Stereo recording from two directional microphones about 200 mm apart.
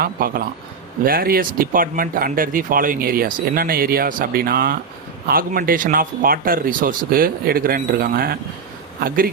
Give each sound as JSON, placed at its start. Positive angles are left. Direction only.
{"t": 0.0, "sound": "speech", "side_deg": -45}